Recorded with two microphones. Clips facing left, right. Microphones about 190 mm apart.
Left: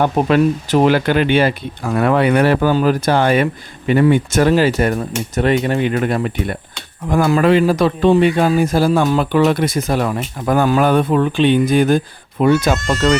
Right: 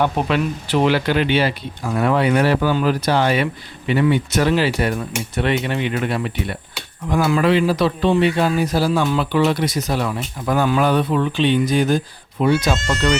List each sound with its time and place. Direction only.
0.0 s a man's voice: 45° left (ahead or behind)